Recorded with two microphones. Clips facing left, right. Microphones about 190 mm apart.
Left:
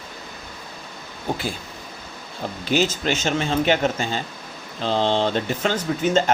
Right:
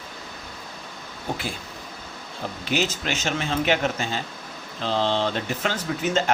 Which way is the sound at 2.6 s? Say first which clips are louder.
Left 5 dB; 35° left (ahead or behind).